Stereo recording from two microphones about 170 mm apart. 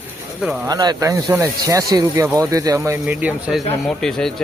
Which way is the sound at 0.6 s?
25° right (ahead or behind).